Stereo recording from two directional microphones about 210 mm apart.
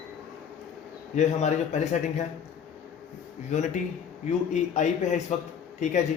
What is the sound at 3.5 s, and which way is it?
A man's voice, 35° left (ahead or behind).